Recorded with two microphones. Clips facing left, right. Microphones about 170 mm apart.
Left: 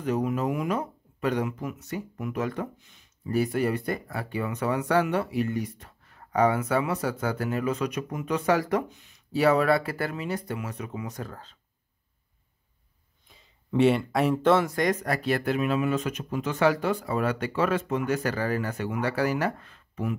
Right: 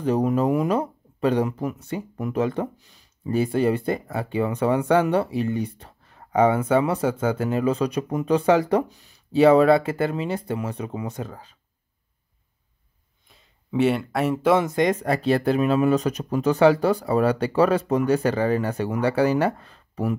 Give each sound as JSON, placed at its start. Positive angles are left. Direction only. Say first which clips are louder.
{"t": 0.0, "sound": "speech", "louder": "right 6 dB", "side_deg": -35}
{"t": 9.3, "sound": "speech", "louder": "right 7 dB", "side_deg": -25}
{"t": 13.3, "sound": "speech", "louder": "right 1 dB", "side_deg": 0}
{"t": 14.6, "sound": "speech", "louder": "right 4 dB", "side_deg": -20}